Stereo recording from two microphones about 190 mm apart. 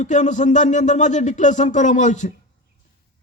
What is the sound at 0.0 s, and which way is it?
A man's voice, 40° left (ahead or behind).